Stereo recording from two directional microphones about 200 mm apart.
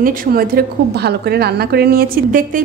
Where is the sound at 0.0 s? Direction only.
45° right (ahead or behind).